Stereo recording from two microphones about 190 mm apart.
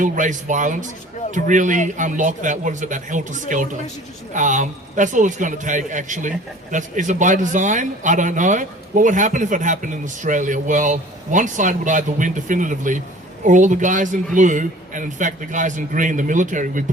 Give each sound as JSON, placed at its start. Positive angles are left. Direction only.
{"t": 0.0, "sound": "a man's voice", "side_deg": -40}